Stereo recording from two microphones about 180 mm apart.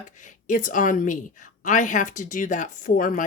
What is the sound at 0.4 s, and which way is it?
Speech, 45° left (ahead or behind).